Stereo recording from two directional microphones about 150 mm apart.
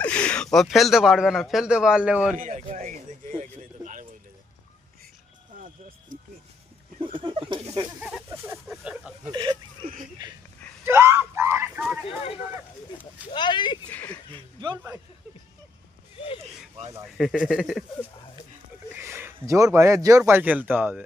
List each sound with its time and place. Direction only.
0.0 s speech: 10° left (ahead or behind)
2.4 s speech: 60° right (ahead or behind)
3.4 s a sound: 55° right (ahead or behind)
7.0 s speech: 35° right (ahead or behind)
8.7 s speech: 5° right (ahead or behind)
9.3 s speech: 30° right (ahead or behind)
10.8 s a sound: 15° right (ahead or behind)
12.0 s speech: 40° left (ahead or behind)
13.3 s speech: 30° left (ahead or behind)
13.9 s speech: 10° left (ahead or behind)
14.8 s speech: 15° right (ahead or behind)
17.2 s speech: 5° right (ahead or behind)
18.9 s speech: 15° right (ahead or behind)